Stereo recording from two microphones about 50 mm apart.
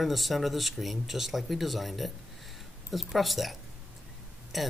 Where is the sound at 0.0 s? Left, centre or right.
Centre.